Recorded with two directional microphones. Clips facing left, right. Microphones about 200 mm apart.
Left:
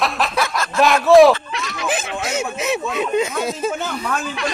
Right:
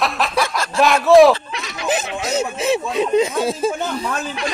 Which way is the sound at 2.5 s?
35° right (ahead or behind).